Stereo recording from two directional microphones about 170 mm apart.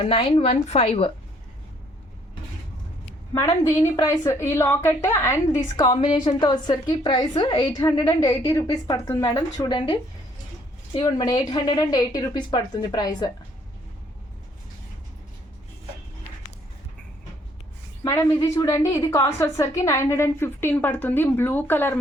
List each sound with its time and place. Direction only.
0.0 s speech: 30° left (ahead or behind)
3.3 s a woman's voice: 15° left (ahead or behind)
18.0 s a woman's voice: 20° left (ahead or behind)